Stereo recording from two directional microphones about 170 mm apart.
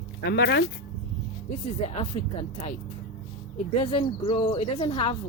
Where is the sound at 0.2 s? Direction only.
80° left.